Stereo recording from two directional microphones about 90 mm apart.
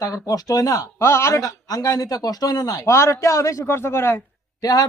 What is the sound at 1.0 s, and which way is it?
Speech, 30° left (ahead or behind).